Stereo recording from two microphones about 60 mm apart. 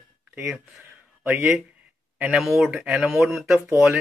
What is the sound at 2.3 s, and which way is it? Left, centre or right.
Speech, centre.